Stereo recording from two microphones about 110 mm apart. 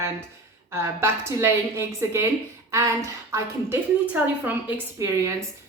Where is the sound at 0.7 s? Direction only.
25° right (ahead or behind).